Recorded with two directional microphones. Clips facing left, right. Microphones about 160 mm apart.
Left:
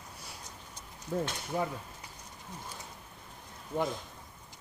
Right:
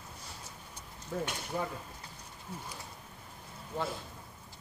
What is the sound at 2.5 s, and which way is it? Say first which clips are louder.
Speech: right 3 dB; 10° right (ahead or behind).